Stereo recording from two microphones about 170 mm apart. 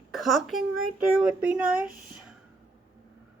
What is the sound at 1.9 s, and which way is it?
Speech, 55° right (ahead or behind).